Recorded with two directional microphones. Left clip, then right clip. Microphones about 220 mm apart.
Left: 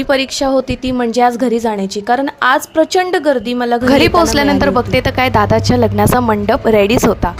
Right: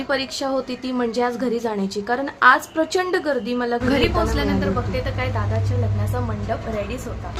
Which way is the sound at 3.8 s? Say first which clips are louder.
Left 12 dB; 50° left (ahead or behind).